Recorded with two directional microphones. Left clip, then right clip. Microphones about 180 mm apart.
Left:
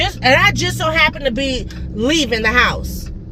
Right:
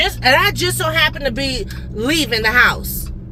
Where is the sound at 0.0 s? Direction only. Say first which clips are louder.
Left 1 dB; 20° left (ahead or behind).